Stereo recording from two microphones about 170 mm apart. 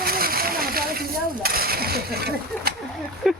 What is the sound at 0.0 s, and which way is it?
Splash, 60° right (ahead or behind).